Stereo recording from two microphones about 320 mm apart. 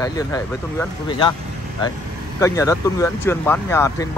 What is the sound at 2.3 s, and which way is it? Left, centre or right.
Speech, centre.